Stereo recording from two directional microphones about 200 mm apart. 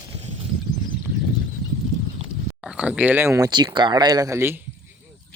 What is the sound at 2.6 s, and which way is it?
Speech, 5° right (ahead or behind).